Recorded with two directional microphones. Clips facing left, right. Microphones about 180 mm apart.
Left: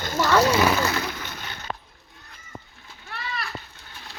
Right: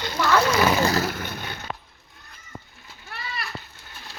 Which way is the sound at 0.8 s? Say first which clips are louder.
Right 3 dB; 40° right (ahead or behind).